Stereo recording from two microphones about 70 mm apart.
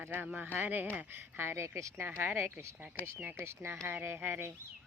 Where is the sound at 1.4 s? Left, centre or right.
Right.